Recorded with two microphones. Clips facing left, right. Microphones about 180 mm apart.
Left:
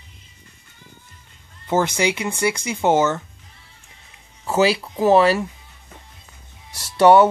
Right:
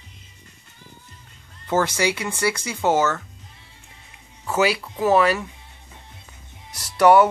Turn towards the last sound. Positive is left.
turn(degrees=25)  # may be behind; listen again after turning